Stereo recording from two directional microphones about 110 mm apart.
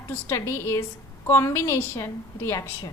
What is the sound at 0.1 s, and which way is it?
A woman's voice, 25° left (ahead or behind).